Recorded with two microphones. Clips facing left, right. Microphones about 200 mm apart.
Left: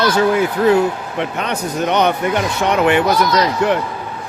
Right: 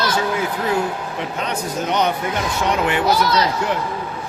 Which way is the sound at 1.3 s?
65° left (ahead or behind).